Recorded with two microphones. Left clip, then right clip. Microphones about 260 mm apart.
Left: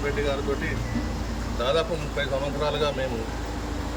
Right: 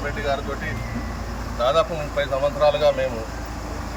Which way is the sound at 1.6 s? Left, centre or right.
Centre.